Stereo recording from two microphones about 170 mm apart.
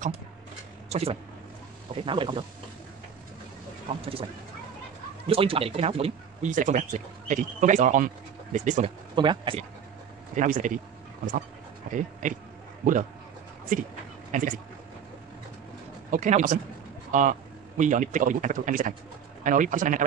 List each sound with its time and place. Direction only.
0.8 s speech: 35° right (ahead or behind)
4.0 s speech: 35° right (ahead or behind)
5.3 s a man's voice: 35° right (ahead or behind)
9.1 s speech: 25° right (ahead or behind)
10.3 s a man's voice: 50° right (ahead or behind)
11.9 s a man's voice: 50° right (ahead or behind)
13.7 s a man's voice: 50° right (ahead or behind)
16.1 s a man's voice: 50° right (ahead or behind)